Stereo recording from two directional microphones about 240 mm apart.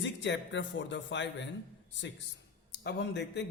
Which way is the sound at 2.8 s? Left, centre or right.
Left.